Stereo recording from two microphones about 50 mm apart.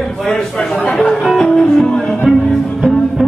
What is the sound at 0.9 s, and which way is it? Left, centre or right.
Music, centre.